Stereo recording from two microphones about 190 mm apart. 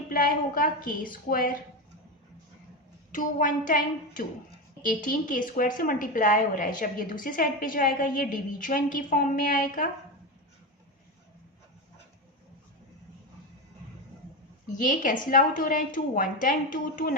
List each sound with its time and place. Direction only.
0.1 s a woman's voice: 50° left (ahead or behind)
3.1 s a woman's voice: 45° left (ahead or behind)
14.7 s a woman's voice: 40° left (ahead or behind)